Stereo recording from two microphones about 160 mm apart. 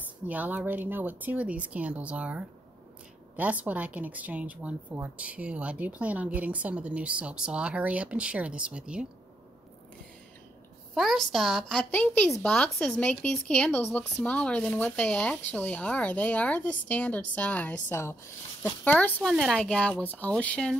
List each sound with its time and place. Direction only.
0.3 s speech: 10° right (ahead or behind)
11.0 s a woman's voice: centre (ahead or behind)